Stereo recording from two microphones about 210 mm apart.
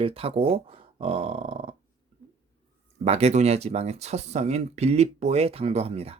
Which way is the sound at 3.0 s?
30° right (ahead or behind).